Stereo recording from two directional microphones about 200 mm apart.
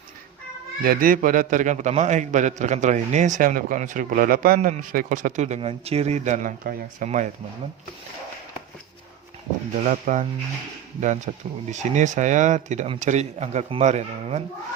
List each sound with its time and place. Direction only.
0.8 s a man's voice: 45° right (ahead or behind)
9.8 s a man's voice: 40° right (ahead or behind)
11.3 s a man's voice: 35° right (ahead or behind)